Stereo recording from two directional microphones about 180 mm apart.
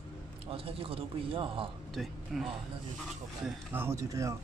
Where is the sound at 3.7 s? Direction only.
15° right (ahead or behind).